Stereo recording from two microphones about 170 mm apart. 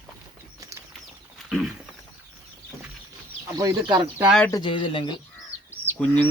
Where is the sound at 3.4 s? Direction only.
20° right (ahead or behind).